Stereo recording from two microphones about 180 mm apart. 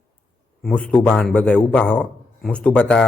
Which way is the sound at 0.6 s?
5° left (ahead or behind).